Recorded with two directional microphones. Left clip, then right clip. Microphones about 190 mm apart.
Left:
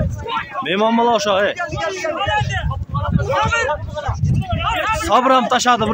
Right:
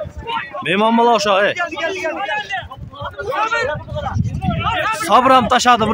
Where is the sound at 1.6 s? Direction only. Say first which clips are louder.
Right 2 dB; 45° right (ahead or behind).